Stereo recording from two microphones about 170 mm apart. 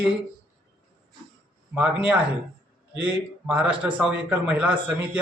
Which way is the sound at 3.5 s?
5° right (ahead or behind).